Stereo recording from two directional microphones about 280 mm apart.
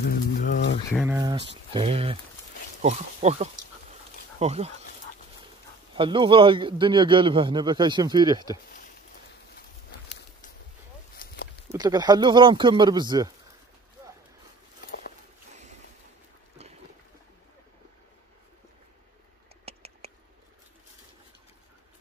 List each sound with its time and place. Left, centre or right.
0.0 s a sound: left
0.9 s a man's voice: centre
1.5 s speech: centre
5.9 s a man's voice: centre
11.7 s a man's voice: centre
19.6 s a sound: right